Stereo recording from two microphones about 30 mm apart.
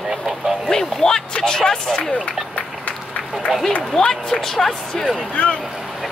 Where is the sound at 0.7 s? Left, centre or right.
Centre.